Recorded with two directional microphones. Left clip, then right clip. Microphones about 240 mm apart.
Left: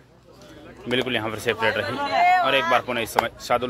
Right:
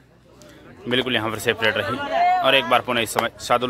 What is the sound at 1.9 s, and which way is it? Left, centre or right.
Speech, centre.